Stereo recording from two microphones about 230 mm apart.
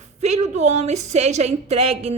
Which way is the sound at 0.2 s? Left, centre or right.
Right.